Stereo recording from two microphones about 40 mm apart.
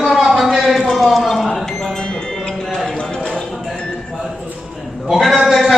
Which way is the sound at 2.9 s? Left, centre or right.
Left.